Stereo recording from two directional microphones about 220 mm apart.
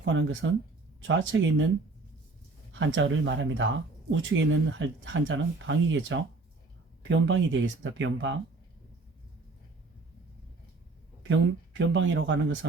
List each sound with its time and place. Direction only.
0.0 s speech: 55° right (ahead or behind)
2.7 s speech: 55° right (ahead or behind)
11.3 s speech: 55° right (ahead or behind)